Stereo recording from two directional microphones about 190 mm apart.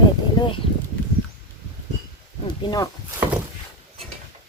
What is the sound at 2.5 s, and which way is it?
Speech, 20° left (ahead or behind).